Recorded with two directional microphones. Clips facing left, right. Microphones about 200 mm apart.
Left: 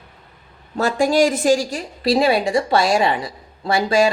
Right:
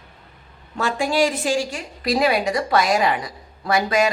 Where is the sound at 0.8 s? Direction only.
40° left (ahead or behind).